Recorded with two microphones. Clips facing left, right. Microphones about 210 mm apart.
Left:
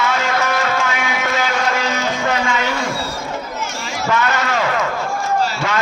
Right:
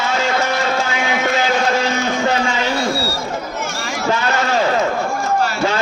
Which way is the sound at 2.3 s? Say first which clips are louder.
Right 1 dB; 30° right (ahead or behind).